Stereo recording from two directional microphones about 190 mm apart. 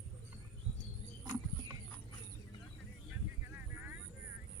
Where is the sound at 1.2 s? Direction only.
20° right (ahead or behind).